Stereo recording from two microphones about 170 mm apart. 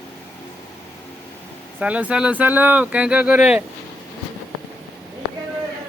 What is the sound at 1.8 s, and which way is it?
Speech, 5° right (ahead or behind).